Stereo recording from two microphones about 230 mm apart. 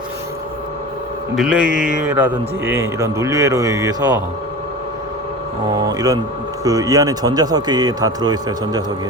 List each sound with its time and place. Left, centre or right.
1.4 s a man's voice: centre
5.7 s a man's voice: centre